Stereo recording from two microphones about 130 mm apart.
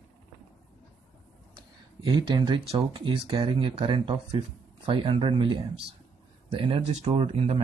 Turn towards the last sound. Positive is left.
turn(degrees=-50)  # may be behind; listen again after turning